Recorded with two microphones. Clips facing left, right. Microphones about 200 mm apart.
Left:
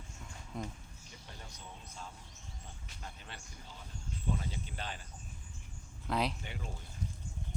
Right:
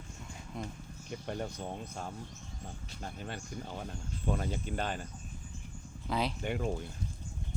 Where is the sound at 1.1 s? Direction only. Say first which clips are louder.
Right 16 dB; 60° right (ahead or behind).